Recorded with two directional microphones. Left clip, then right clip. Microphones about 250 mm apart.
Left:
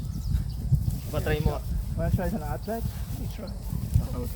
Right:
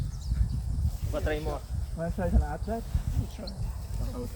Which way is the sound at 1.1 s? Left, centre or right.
Left.